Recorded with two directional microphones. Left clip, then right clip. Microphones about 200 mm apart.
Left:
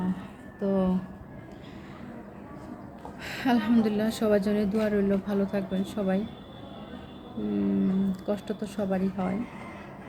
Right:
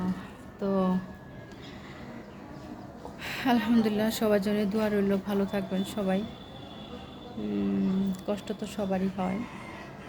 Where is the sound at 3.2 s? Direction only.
Centre (ahead or behind).